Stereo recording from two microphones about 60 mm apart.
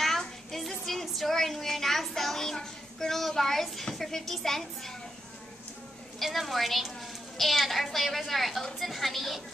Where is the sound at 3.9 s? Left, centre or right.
Centre.